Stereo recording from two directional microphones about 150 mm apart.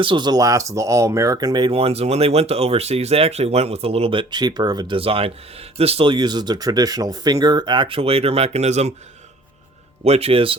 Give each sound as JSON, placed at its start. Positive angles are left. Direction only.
{"t": 0.0, "sound": "speech", "side_deg": -30}
{"t": 10.0, "sound": "speech", "side_deg": -40}